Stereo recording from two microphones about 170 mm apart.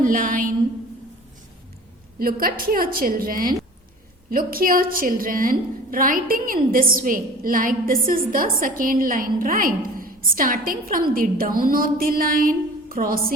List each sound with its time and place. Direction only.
0.0 s a woman's voice: 55° right (ahead or behind)
2.1 s a woman's voice: 60° right (ahead or behind)